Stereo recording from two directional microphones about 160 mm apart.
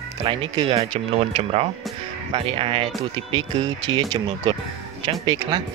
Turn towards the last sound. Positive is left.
turn(degrees=-30)  # may be behind; listen again after turning